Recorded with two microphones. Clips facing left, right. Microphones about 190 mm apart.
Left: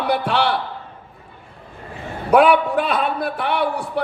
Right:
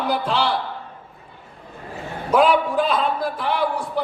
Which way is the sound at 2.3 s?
65° left (ahead or behind).